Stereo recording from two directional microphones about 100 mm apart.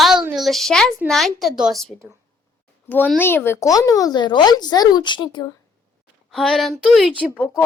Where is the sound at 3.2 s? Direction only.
20° left (ahead or behind); by 5.5 s 45° left (ahead or behind).